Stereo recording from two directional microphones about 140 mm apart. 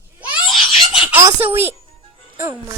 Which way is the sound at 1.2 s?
15° right (ahead or behind).